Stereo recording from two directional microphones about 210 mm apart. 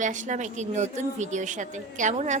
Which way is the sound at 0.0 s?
35° right (ahead or behind).